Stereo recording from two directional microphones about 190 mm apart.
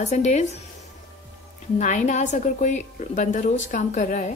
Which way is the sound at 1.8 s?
40° left (ahead or behind).